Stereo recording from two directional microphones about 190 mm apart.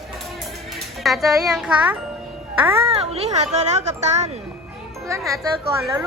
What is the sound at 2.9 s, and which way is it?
Speech, 30° right (ahead or behind).